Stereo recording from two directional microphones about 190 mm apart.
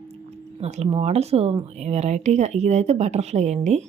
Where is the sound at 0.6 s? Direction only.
35° right (ahead or behind).